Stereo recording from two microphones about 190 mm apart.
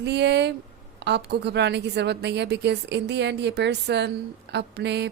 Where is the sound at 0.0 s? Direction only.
65° right (ahead or behind).